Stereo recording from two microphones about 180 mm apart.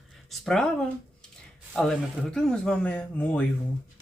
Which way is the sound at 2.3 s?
5° left (ahead or behind).